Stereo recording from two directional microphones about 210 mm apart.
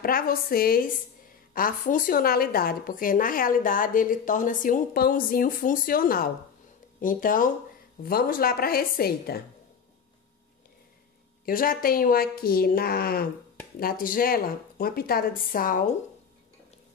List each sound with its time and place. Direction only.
0.0 s a woman's voice: 45° left (ahead or behind)
11.4 s speech: 45° left (ahead or behind)